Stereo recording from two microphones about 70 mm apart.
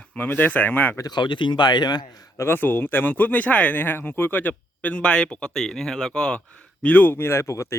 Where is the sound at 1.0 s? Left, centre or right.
Left.